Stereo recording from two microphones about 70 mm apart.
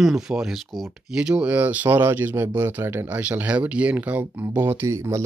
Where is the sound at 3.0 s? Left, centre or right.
Right.